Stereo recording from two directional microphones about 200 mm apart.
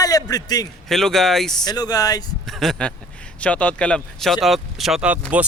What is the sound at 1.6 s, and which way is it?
Speech, 20° left (ahead or behind).